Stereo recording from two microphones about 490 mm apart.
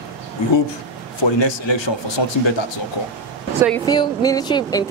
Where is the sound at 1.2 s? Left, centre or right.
Left.